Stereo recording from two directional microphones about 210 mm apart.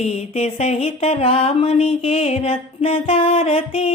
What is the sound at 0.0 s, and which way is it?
Music, 30° left (ahead or behind).